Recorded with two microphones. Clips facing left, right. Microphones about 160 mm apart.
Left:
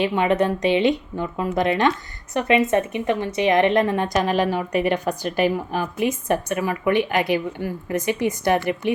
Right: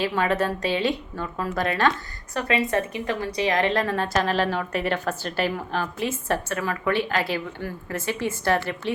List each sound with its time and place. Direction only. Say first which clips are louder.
0.0 s a woman's voice: left 4 dB; 20° left (ahead or behind)